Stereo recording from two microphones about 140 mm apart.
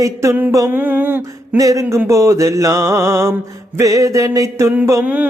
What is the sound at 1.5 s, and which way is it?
Mantra, 25° right (ahead or behind).